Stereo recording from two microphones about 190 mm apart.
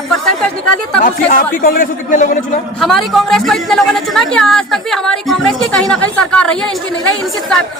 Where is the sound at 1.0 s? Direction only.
50° left (ahead or behind).